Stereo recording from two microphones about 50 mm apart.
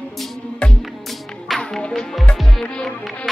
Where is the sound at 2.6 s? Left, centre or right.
Centre.